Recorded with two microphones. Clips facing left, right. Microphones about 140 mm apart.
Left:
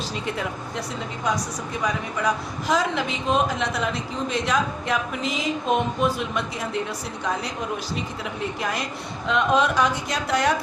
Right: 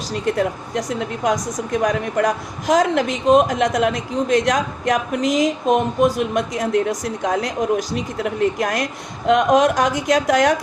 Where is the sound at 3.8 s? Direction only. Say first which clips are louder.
Right 7 dB; 75° right (ahead or behind).